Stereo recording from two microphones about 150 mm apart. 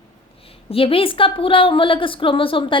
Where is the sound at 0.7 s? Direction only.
40° left (ahead or behind).